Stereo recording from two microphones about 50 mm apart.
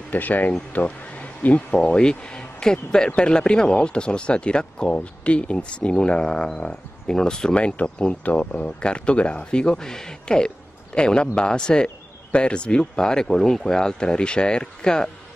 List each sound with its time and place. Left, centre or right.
0.1 s speech: left
1.9 s speech: centre
7.5 s speech: left